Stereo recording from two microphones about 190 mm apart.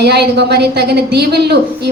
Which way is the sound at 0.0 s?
60° right (ahead or behind).